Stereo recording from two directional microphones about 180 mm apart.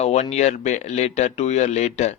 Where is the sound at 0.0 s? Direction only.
35° left (ahead or behind).